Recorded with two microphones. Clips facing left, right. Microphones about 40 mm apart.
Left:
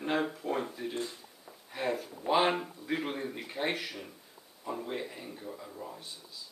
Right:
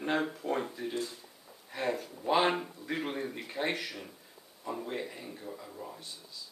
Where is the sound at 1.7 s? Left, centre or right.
Centre.